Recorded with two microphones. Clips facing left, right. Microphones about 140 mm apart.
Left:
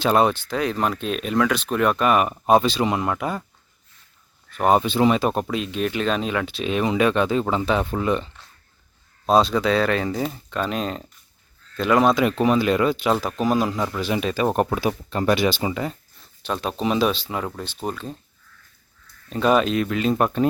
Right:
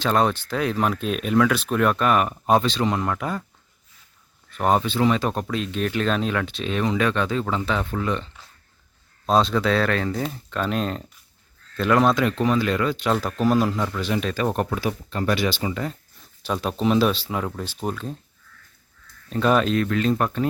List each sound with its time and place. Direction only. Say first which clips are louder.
0.0 s speech: left 2 dB; 10° left (ahead or behind)
4.5 s speech: left 2 dB; 5° left (ahead or behind)
4.8 s speech: left 2 dB; 15° left (ahead or behind)
9.2 s speech: left 2 dB; 5° left (ahead or behind)
16.4 s speech: right 1 dB; 5° right (ahead or behind)
19.3 s speech: left 1 dB; 5° left (ahead or behind); by 20.5 s 20° left (ahead or behind)